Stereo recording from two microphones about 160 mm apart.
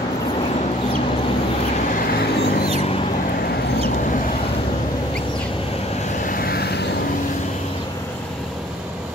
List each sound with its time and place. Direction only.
2.0 s vehicle: 70° left (ahead or behind)
6.2 s vehicle: 65° left (ahead or behind); by 6.8 s 85° left